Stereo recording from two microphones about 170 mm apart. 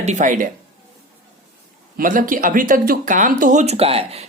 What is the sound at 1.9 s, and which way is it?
Speech, 55° right (ahead or behind).